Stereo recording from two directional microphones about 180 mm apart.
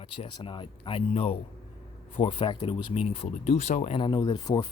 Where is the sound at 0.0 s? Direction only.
30° left (ahead or behind).